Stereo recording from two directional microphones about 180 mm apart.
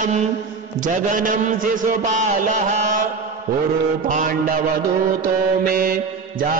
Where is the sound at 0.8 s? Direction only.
45° right (ahead or behind).